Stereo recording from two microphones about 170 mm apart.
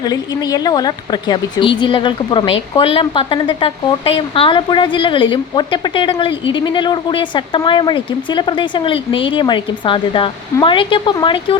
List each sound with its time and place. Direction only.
0.0 s a woman's voice: 20° left (ahead or behind)